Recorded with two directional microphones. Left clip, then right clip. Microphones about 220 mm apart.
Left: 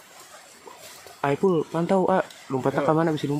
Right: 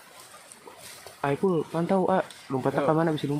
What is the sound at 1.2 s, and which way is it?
Speech, 10° left (ahead or behind).